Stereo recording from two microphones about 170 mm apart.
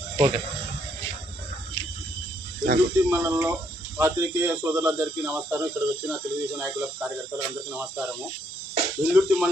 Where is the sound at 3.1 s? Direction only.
15° right (ahead or behind).